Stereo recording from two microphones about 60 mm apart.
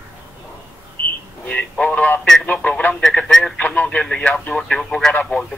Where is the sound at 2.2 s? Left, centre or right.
Centre.